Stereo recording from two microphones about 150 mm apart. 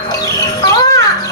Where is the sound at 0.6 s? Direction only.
25° left (ahead or behind).